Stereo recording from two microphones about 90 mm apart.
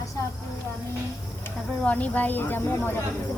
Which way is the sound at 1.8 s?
15° left (ahead or behind).